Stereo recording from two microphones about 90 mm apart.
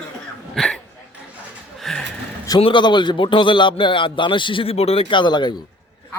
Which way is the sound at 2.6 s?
90° left.